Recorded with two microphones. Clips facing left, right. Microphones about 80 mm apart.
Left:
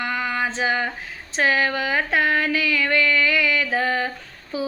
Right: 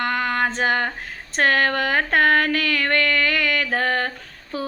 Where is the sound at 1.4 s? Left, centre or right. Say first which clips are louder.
Right 2 dB; right.